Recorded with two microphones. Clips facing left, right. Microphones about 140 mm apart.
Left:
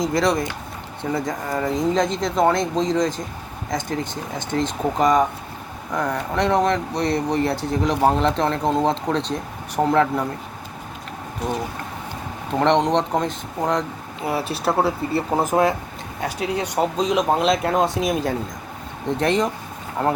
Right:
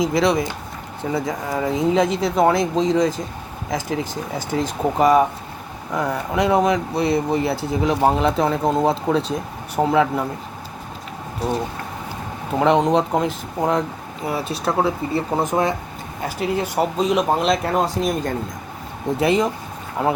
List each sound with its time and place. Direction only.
0.0 s speech: centre (ahead or behind)
11.4 s speech: 35° right (ahead or behind)
12.5 s speech: 5° right (ahead or behind)
19.0 s speech: 5° right (ahead or behind)